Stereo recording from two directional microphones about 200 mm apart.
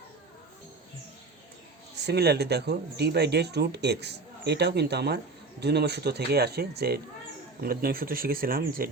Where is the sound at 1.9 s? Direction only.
55° right (ahead or behind).